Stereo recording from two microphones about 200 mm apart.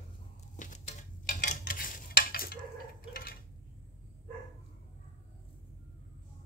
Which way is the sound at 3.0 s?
45° left (ahead or behind).